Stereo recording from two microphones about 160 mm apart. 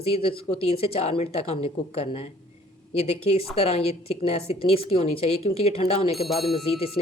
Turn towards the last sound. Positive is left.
turn(degrees=35)  # may be behind; listen again after turning